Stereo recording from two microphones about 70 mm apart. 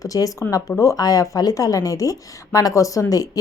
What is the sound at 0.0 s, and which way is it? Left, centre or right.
Speech, left.